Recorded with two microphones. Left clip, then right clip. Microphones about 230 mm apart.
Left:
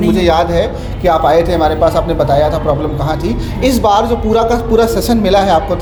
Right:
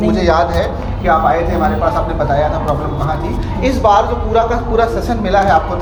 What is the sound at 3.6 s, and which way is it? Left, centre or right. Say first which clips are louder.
A man's voice: even; left.